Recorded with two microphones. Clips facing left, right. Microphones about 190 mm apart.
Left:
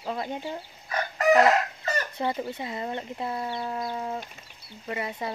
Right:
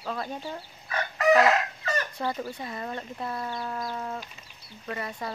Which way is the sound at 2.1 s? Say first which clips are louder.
Left 2 dB; 25° left (ahead or behind).